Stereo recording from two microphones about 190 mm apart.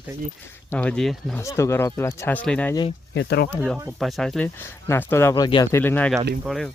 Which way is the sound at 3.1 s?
60° left (ahead or behind).